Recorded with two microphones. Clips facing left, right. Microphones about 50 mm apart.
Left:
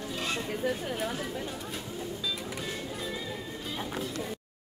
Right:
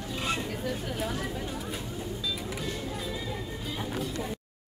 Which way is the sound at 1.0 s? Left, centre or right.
Centre.